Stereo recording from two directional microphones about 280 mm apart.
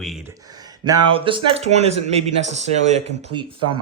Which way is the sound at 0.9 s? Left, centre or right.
Centre.